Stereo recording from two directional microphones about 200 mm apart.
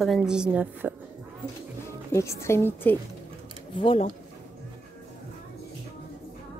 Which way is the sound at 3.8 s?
25° left (ahead or behind).